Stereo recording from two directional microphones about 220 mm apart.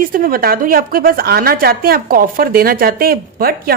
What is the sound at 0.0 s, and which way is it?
A woman's voice, 40° right (ahead or behind).